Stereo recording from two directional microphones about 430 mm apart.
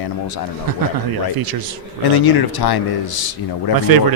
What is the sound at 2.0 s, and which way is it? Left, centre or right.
Speech, left.